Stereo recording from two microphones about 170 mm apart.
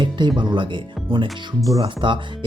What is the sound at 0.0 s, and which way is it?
Speech, 25° right (ahead or behind).